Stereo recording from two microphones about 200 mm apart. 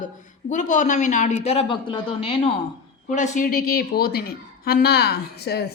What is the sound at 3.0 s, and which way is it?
A woman's voice, 35° left (ahead or behind).